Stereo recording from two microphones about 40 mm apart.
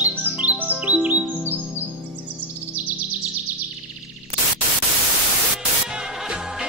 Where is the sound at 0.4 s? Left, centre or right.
Right.